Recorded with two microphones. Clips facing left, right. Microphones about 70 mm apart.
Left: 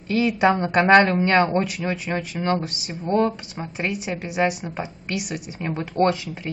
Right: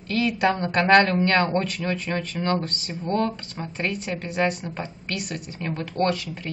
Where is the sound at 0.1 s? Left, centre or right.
Centre.